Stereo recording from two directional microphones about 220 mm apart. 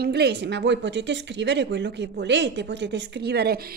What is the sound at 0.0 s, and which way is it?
A woman's voice, 45° right (ahead or behind).